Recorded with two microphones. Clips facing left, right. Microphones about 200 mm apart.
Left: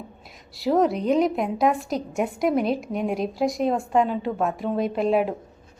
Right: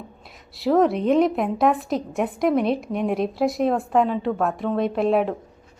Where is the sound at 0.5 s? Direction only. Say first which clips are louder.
Right 2 dB; centre (ahead or behind).